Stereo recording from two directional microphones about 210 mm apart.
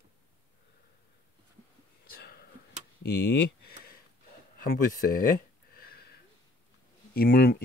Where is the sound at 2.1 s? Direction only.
50° left (ahead or behind).